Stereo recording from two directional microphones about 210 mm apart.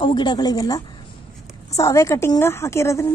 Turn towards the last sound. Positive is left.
turn(degrees=15)  # may be behind; listen again after turning